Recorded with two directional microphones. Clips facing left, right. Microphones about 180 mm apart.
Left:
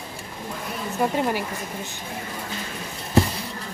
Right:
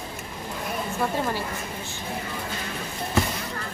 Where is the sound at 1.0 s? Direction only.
15° left (ahead or behind).